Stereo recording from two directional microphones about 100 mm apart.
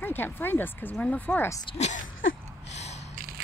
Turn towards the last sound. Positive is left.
turn(degrees=90)